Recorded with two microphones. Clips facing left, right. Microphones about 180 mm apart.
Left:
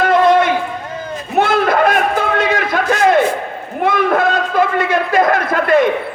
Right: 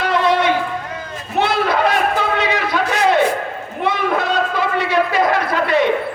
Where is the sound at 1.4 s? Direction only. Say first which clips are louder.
Left 3 dB; 50° left (ahead or behind).